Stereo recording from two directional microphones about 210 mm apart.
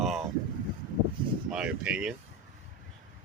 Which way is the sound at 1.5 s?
5° right (ahead or behind).